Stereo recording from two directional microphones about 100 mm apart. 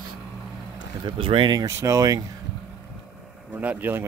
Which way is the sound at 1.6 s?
30° right (ahead or behind).